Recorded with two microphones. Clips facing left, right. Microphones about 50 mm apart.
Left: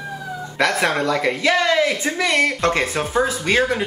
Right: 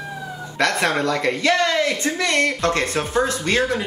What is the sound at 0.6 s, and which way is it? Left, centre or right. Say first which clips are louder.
Speech: left 1 dB; centre.